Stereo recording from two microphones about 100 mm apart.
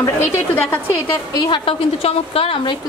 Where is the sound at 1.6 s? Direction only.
75° left (ahead or behind).